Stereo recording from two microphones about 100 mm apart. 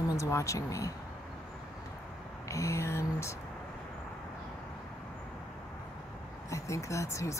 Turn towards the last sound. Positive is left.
turn(degrees=30)  # may be behind; listen again after turning